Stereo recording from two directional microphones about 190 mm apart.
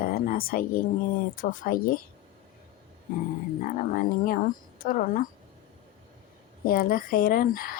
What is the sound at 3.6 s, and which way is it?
A woman's voice, 45° left (ahead or behind).